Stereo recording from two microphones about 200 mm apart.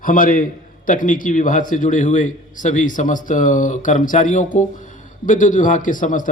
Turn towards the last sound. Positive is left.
turn(degrees=40)  # may be behind; listen again after turning